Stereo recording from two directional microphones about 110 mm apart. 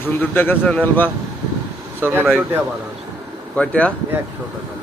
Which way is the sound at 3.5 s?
10° left (ahead or behind).